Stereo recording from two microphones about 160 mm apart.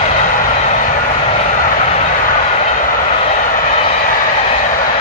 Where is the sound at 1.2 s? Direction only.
45° left (ahead or behind).